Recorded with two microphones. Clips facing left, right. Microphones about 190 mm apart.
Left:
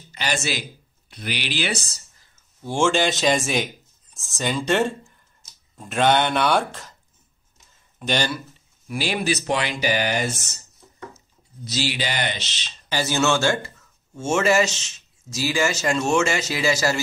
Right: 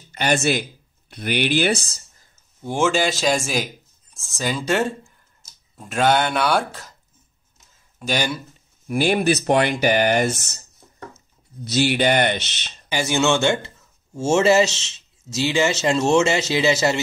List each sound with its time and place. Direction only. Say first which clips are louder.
0.1 s speech: right 7 dB; 55° right (ahead or behind)
2.7 s speech: even; 5° right (ahead or behind)
8.8 s speech: right 6 dB; 50° right (ahead or behind)
11.6 s speech: right 8 dB; 60° right (ahead or behind)
12.9 s speech: right 2 dB; 15° right (ahead or behind)